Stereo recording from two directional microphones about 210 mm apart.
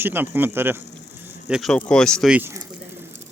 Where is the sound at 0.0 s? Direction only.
10° right (ahead or behind).